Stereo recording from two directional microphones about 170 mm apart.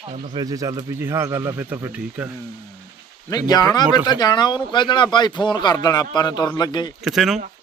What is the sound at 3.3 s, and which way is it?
Speech, 25° left (ahead or behind).